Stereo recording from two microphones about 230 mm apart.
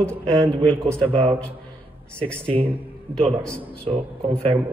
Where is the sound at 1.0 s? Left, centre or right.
Right.